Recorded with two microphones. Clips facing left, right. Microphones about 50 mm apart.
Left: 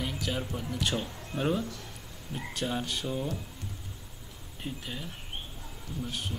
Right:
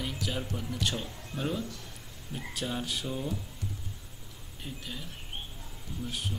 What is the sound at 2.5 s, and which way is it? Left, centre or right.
Speech, centre.